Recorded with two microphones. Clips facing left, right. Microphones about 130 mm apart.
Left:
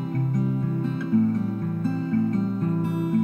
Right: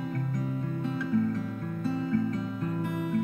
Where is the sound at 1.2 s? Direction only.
35° left (ahead or behind).